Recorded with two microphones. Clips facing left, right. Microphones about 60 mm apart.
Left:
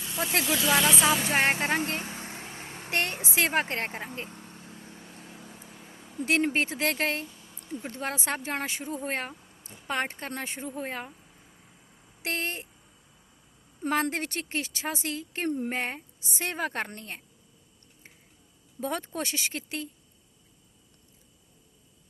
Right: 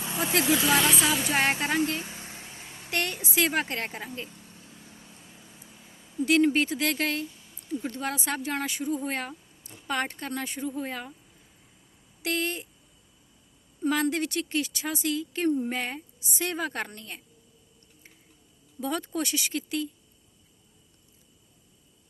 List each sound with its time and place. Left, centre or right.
0.0 s vehicle: right
0.9 s music: left
1.2 s a sound: left
3.0 s vehicle: left
6.2 s speech: left
12.2 s speech: left
13.8 s speech: left
15.8 s speech: left
18.8 s speech: left